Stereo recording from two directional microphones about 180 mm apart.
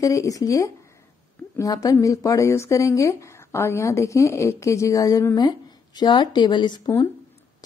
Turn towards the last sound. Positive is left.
turn(degrees=20)  # may be behind; listen again after turning